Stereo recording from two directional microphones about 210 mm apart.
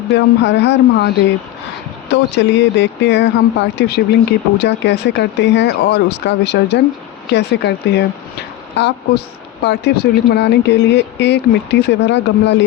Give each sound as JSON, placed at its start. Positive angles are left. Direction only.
{"t": 0.1, "sound": "a woman's voice", "side_deg": 55}